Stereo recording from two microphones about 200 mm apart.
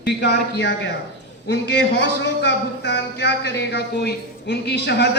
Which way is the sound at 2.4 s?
60° left (ahead or behind).